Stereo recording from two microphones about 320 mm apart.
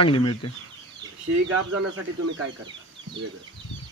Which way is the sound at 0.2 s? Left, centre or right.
Left.